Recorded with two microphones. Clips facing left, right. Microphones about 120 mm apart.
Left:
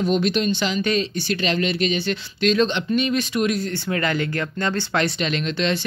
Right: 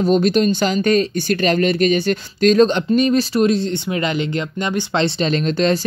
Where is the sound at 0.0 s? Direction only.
40° right (ahead or behind).